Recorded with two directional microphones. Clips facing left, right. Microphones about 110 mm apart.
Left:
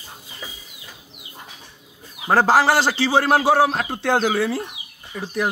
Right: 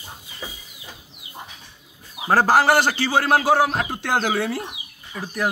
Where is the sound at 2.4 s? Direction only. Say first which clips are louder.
Right 1 dB; 20° left (ahead or behind).